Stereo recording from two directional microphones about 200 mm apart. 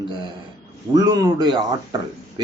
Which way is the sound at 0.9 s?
20° right (ahead or behind).